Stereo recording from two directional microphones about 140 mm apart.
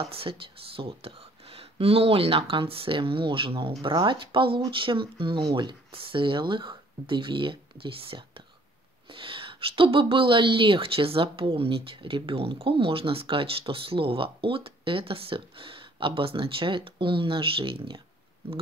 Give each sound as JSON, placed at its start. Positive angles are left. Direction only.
{"t": 0.0, "sound": "a woman's voice", "side_deg": -40}